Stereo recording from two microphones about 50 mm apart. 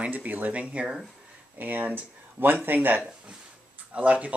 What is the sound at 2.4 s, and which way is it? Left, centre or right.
Speech, right.